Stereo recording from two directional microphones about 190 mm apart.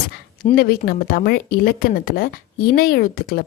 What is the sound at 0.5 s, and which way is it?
Speech, 50° left (ahead or behind).